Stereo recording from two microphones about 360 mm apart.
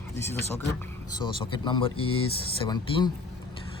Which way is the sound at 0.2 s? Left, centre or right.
Centre.